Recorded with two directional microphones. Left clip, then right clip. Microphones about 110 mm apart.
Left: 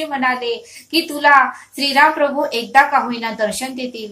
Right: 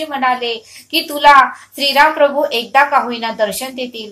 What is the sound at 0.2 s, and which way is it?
Speech, 25° right (ahead or behind).